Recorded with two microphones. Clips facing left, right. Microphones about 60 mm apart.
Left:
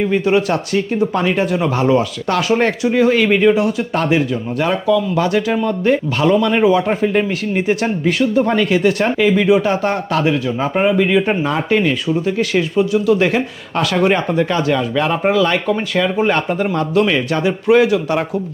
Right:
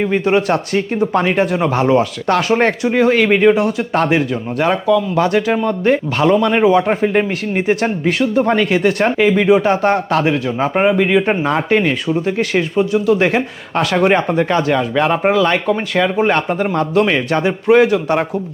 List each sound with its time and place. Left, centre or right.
0.0 s speech: right
5.8 s speech: right
6.8 s speech: right
8.0 s speech: right
12.5 s speech: right
16.1 s speech: right